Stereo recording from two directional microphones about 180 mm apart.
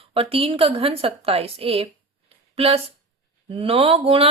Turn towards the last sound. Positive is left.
turn(degrees=-35)  # may be behind; listen again after turning